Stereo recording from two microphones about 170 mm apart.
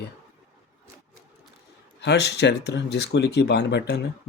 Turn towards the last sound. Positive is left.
turn(degrees=80)